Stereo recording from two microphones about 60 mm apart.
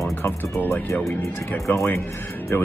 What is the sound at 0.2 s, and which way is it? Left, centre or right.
A man's voice, left.